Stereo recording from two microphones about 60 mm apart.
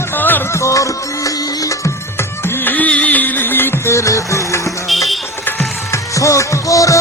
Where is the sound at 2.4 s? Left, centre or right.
Left.